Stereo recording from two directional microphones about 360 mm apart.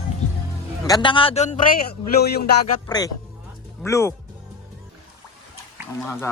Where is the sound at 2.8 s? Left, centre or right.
Centre.